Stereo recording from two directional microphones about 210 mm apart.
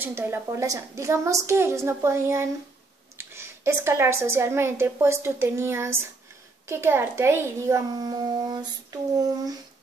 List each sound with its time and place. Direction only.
0.0 s a woman's voice: 10° right (ahead or behind)